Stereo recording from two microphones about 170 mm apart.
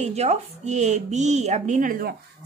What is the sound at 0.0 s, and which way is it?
A woman's voice, 40° right (ahead or behind).